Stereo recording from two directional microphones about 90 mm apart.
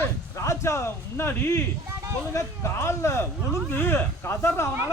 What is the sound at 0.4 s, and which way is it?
A man's voice, 30° left (ahead or behind).